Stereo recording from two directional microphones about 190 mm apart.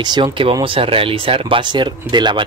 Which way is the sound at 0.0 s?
25° right (ahead or behind).